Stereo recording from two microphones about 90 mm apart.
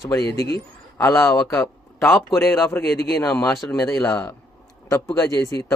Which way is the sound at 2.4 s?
25° left (ahead or behind).